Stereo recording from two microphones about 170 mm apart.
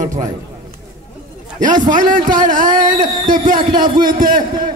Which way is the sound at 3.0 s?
25° right (ahead or behind).